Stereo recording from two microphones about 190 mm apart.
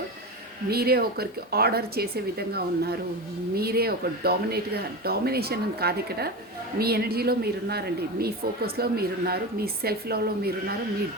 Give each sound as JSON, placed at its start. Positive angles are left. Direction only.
{"t": 0.7, "sound": "speech", "side_deg": -55}